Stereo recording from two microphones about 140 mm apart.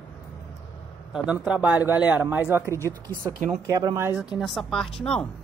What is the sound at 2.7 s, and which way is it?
Speech, 20° left (ahead or behind).